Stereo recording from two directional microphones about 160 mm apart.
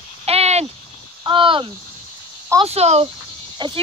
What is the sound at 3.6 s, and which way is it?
Speech, 25° right (ahead or behind).